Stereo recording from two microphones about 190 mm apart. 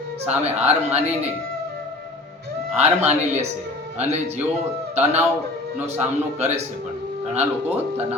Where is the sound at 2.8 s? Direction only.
35° right (ahead or behind).